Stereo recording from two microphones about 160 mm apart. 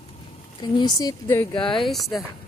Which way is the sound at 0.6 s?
25° left (ahead or behind).